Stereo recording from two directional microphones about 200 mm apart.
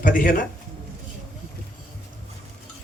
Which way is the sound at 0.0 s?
40° left (ahead or behind).